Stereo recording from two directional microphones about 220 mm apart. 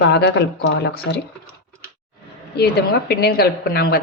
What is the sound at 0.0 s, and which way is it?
A woman's voice, 50° left (ahead or behind).